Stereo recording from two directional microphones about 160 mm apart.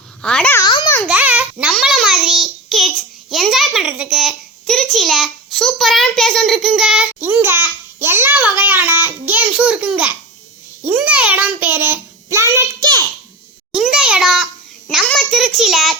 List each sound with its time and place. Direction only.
0.2 s a child's voice: 5° left (ahead or behind)
0.6 s a sound: 30° left (ahead or behind)
1.0 s babbling: 10° right (ahead or behind)
7.2 s a child's voice: 10° right (ahead or behind)
13.7 s a child's voice: 5° right (ahead or behind)